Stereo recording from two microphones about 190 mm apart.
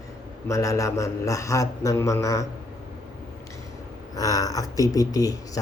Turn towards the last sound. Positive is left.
turn(degrees=20)  # may be behind; listen again after turning